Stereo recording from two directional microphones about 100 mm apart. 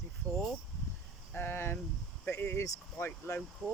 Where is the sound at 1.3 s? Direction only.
20° left (ahead or behind).